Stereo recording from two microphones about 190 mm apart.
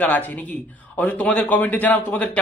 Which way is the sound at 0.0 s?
10° left (ahead or behind).